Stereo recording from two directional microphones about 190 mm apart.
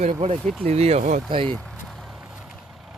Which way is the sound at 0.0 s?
35° right (ahead or behind).